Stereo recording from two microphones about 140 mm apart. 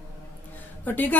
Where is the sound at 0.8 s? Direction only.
15° left (ahead or behind).